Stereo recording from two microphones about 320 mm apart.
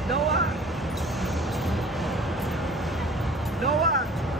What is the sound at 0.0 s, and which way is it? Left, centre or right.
Vehicle, centre.